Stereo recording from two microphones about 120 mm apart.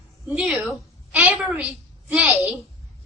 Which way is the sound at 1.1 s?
10° right (ahead or behind).